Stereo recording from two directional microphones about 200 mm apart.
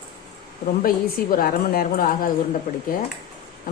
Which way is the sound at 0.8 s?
45° left (ahead or behind).